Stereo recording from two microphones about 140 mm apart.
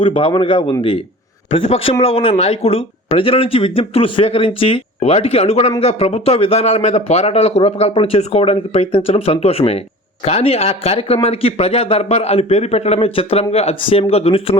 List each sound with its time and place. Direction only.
0.0 s speech: 40° left (ahead or behind)